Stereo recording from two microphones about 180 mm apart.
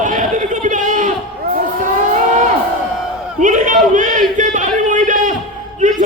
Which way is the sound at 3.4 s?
45° right (ahead or behind).